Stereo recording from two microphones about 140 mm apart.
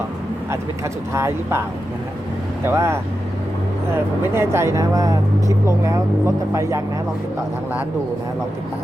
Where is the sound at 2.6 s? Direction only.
20° right (ahead or behind).